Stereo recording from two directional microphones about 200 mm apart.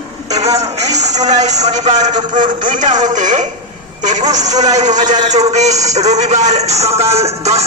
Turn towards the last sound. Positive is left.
turn(degrees=-30)  # may be behind; listen again after turning